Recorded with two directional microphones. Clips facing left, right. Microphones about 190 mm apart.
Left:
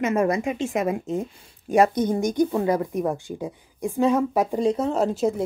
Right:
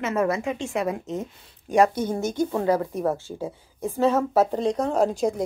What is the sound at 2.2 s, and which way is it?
A woman's voice, 15° left (ahead or behind).